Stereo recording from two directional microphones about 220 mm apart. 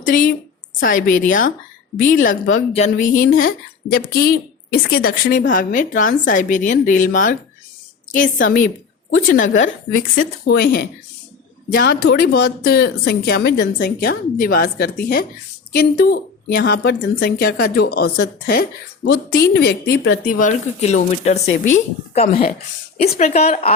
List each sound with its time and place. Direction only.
0.1 s a woman's voice: 40° left (ahead or behind)
20.4 s a woman's voice: 30° left (ahead or behind)
23.0 s speech: 35° left (ahead or behind)